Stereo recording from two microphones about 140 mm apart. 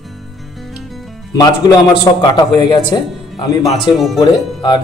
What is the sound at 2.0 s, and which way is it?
Speech, 30° left (ahead or behind).